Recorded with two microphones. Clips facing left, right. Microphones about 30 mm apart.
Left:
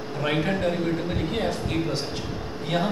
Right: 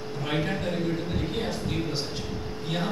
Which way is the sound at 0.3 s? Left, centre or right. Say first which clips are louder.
Left 4 dB; centre.